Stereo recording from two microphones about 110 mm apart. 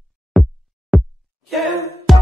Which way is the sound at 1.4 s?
Centre (ahead or behind).